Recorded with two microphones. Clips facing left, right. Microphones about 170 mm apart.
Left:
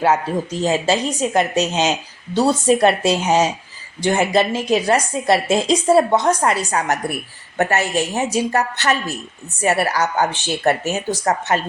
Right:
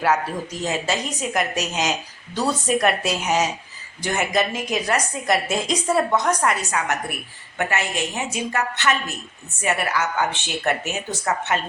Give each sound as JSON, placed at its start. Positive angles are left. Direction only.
{"t": 0.0, "sound": "a woman's voice", "side_deg": 25}